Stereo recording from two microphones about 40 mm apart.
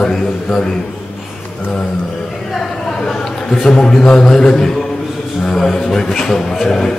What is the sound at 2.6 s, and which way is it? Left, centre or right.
A man's voice, centre.